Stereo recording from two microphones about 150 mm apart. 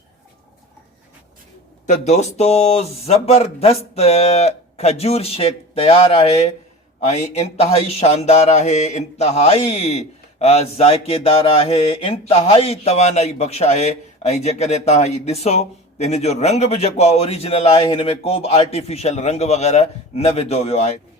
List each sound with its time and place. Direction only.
1.9 s mantra: 50° left (ahead or behind)